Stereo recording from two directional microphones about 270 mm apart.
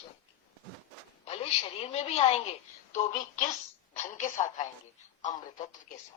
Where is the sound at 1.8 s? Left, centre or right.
Left.